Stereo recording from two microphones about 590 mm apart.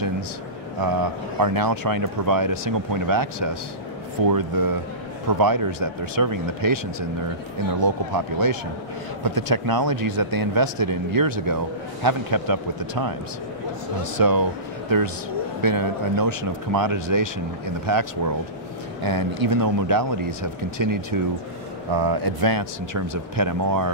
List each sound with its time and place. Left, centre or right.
0.8 s speech: right
9.2 s speech: right
14.1 s speech: right
15.6 s speech: right